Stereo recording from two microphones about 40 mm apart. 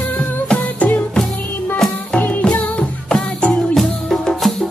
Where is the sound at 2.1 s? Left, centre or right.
Left.